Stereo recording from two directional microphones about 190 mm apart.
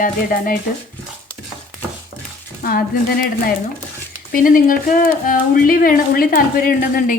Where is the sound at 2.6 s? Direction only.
50° left (ahead or behind).